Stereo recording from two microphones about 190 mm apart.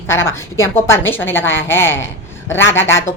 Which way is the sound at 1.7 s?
10° left (ahead or behind).